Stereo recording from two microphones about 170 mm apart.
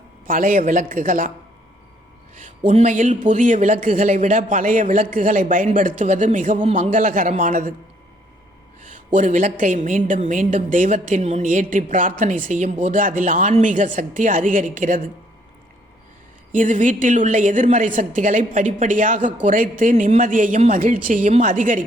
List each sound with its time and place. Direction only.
0.3 s a woman's voice: 50° right (ahead or behind)
2.4 s a woman's voice: 40° right (ahead or behind)
9.0 s a woman's voice: 45° right (ahead or behind)
16.5 s a woman's voice: 50° right (ahead or behind)